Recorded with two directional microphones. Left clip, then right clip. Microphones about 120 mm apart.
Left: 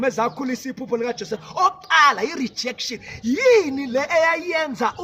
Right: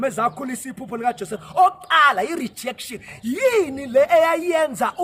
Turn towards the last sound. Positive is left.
turn(degrees=-50)  # may be behind; listen again after turning